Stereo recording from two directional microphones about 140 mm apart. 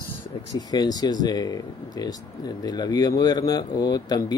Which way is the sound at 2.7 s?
30° left (ahead or behind).